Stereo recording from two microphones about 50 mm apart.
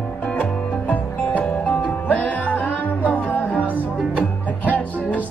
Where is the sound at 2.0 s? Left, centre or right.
Left.